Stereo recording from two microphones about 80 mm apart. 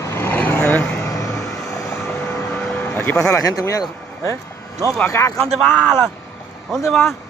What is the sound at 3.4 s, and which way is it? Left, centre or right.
Speech, left.